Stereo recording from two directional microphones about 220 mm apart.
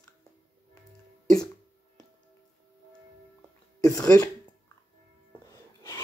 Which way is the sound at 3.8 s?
15° left (ahead or behind).